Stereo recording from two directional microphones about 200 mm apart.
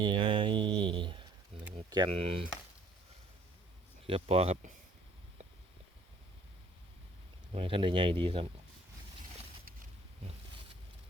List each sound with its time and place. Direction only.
0.0 s a sound: 25° right (ahead or behind)
1.7 s speech: 25° right (ahead or behind)
4.0 s speech: 30° right (ahead or behind)
7.5 s speech: 25° right (ahead or behind)